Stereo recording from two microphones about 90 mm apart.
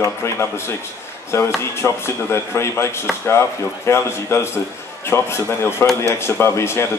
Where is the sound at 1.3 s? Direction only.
30° left (ahead or behind).